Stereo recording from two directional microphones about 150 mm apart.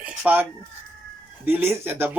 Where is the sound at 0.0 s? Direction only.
5° right (ahead or behind).